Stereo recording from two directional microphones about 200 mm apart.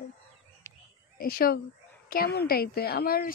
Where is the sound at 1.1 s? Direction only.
45° left (ahead or behind).